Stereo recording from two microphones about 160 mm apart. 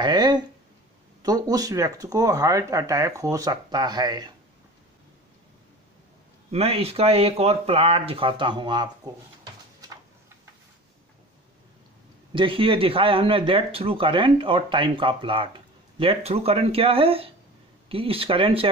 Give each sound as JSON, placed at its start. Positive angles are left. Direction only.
{"t": 0.0, "sound": "speech", "side_deg": -25}
{"t": 6.5, "sound": "speech", "side_deg": -40}
{"t": 12.3, "sound": "speech", "side_deg": -30}